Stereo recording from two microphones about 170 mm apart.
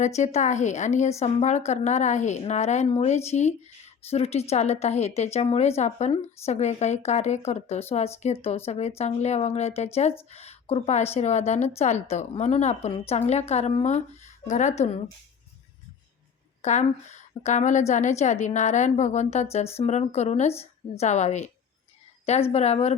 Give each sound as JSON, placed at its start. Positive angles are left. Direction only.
{"t": 0.0, "sound": "a woman's voice", "side_deg": 40}
{"t": 16.6, "sound": "a woman's voice", "side_deg": 45}